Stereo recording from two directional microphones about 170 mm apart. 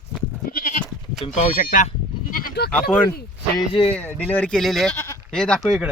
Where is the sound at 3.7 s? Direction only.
30° left (ahead or behind).